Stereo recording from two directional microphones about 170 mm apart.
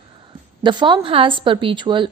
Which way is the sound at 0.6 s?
30° right (ahead or behind).